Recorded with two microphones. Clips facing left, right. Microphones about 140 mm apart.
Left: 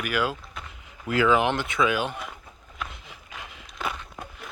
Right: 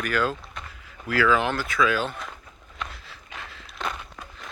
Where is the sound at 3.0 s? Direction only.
15° left (ahead or behind).